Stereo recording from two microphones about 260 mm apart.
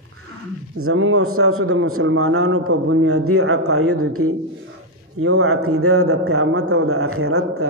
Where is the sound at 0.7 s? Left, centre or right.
Right.